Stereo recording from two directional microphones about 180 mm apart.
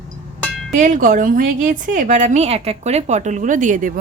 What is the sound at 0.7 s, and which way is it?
A woman's voice, 45° right (ahead or behind).